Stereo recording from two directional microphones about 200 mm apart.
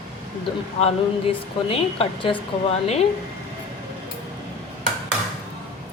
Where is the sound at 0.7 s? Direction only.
30° left (ahead or behind).